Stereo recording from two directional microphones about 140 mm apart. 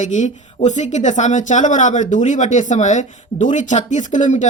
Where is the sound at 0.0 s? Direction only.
60° left (ahead or behind).